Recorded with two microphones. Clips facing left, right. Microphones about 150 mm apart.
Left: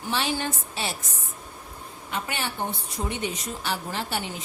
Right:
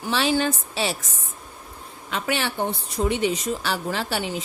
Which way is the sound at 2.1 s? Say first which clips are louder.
Right 5 dB; 90° right.